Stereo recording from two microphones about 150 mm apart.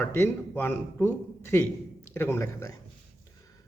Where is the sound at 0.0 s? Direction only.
15° left (ahead or behind).